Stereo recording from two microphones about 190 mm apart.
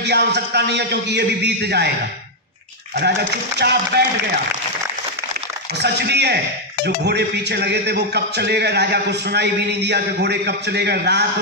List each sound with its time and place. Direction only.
0.0 s a man's voice: 60° right (ahead or behind)
3.0 s a man's voice: 60° right (ahead or behind)
5.8 s a man's voice: 60° right (ahead or behind)